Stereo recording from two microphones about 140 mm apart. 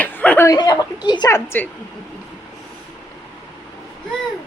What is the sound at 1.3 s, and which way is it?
Speech, 15° left (ahead or behind).